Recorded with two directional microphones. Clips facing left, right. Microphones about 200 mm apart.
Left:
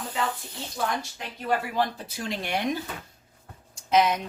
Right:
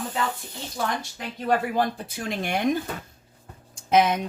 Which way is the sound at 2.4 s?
50° right (ahead or behind).